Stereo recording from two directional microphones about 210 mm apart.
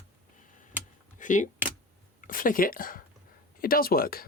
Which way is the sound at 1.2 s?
35° left (ahead or behind).